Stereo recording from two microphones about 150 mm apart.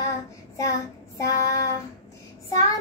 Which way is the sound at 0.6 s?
20° left (ahead or behind).